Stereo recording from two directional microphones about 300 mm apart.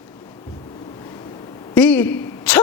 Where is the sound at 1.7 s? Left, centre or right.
Centre.